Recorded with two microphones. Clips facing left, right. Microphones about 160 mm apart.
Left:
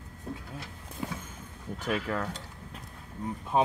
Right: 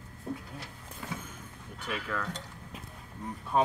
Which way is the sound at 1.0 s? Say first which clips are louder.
Left 4 dB; 15° left (ahead or behind).